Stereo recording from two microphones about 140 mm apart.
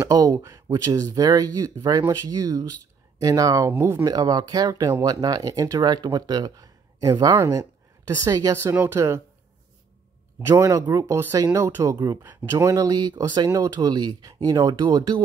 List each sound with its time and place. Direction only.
0.1 s speech: 25° right (ahead or behind)
10.4 s speech: 25° right (ahead or behind)